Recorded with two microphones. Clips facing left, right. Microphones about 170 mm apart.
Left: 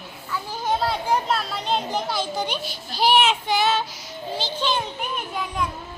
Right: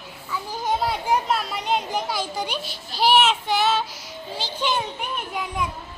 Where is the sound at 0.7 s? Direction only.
15° right (ahead or behind).